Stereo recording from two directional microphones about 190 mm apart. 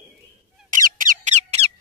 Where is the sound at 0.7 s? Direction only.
45° right (ahead or behind).